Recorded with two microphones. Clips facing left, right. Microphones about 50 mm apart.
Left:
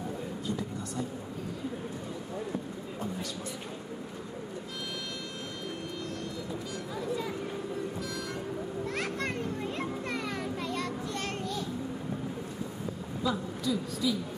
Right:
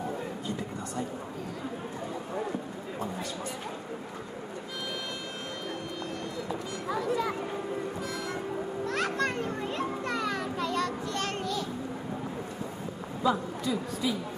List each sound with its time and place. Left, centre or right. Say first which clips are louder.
6.9 s a sound: right 6 dB; right
8.8 s children playing: right 6 dB; right
13.2 s a woman's voice: right 4 dB; right